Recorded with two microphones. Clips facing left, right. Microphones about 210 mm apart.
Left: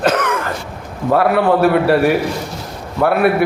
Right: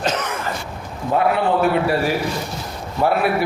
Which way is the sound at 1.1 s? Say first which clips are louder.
Left 5 dB; 65° left (ahead or behind).